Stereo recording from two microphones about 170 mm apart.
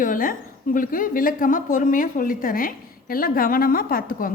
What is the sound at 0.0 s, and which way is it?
A woman's voice, 55° left (ahead or behind).